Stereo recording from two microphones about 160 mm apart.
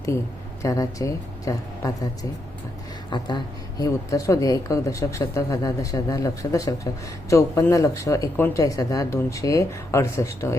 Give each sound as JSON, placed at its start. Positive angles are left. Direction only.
{"t": 0.6, "sound": "speech", "side_deg": 20}
{"t": 3.1, "sound": "speech", "side_deg": 30}